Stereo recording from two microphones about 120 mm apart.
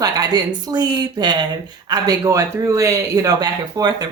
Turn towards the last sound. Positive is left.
turn(degrees=-35)  # may be behind; listen again after turning